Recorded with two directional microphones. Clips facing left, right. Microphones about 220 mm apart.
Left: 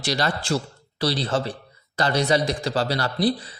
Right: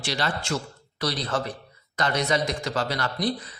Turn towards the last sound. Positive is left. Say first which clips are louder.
# left 5 dB
turn(degrees=30)  # may be behind; listen again after turning